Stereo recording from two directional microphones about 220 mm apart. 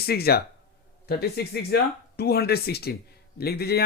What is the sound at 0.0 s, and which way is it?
Speech, 45° left (ahead or behind).